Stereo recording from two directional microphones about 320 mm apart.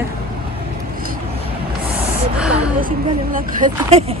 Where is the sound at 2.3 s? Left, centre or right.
Centre.